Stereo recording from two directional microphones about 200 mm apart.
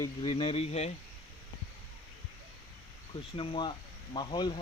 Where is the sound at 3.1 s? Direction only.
25° left (ahead or behind).